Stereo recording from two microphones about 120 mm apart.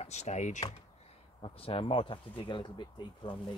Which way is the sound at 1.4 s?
50° left (ahead or behind).